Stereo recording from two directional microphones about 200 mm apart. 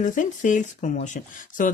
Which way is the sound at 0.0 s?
40° left (ahead or behind).